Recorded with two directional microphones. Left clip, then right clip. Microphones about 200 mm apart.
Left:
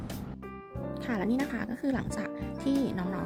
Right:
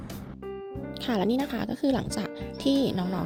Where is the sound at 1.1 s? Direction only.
25° right (ahead or behind).